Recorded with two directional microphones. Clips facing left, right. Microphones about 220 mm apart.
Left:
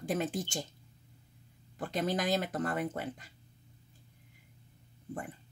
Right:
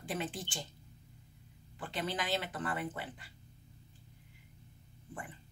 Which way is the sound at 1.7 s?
40° left (ahead or behind).